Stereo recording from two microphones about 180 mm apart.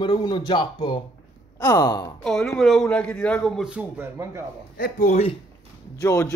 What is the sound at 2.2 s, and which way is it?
A man's voice, centre (ahead or behind).